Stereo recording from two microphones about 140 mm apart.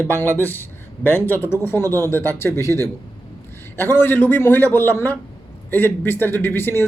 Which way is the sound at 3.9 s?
15° left (ahead or behind).